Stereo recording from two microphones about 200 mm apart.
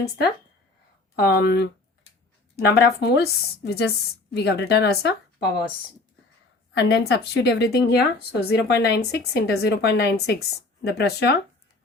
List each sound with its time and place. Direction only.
1.1 s a woman's voice: 50° left (ahead or behind)
6.7 s a woman's voice: 55° left (ahead or behind)